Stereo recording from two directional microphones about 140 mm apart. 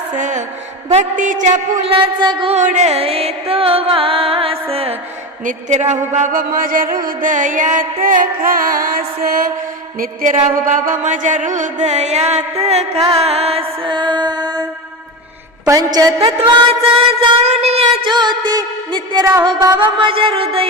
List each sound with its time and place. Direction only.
0.1 s music: 60° right (ahead or behind)
1.9 s music: 35° right (ahead or behind)
2.6 s music: 55° right (ahead or behind)
5.5 s music: 60° right (ahead or behind); by 10.3 s 85° right
10.7 s music: 65° right (ahead or behind); by 14.6 s 30° right (ahead or behind)
15.6 s a woman's voice: 20° right (ahead or behind)
16.5 s music: 40° right (ahead or behind)